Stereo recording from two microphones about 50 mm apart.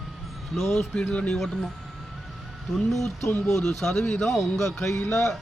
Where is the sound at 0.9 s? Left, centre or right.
Left.